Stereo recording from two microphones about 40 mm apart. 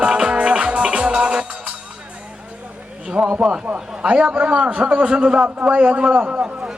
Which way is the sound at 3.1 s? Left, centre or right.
Right.